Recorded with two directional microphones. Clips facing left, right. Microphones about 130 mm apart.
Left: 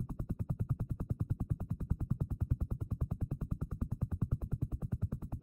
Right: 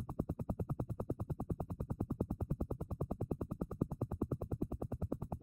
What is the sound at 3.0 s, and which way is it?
Music, 35° right (ahead or behind).